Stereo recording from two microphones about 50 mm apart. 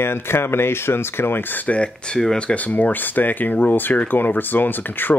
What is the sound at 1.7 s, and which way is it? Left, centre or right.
Speech, left.